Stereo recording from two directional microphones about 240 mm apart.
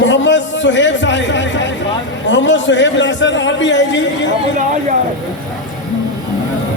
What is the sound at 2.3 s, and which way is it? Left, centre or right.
A man's voice, left.